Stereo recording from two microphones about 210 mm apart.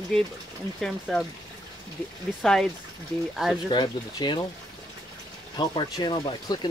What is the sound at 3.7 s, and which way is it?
Speech, 20° left (ahead or behind).